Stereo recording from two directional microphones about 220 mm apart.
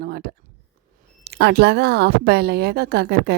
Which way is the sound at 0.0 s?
45° right (ahead or behind).